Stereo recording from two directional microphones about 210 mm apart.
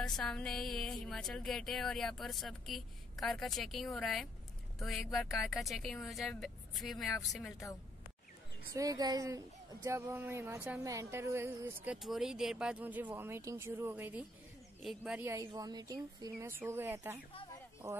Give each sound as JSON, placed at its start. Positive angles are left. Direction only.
{"t": 0.0, "sound": "speech", "side_deg": 0}
{"t": 8.7, "sound": "speech", "side_deg": -15}
{"t": 17.3, "sound": "a sound", "side_deg": 25}